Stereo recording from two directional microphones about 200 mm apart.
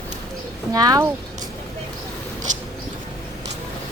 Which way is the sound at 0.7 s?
20° right (ahead or behind).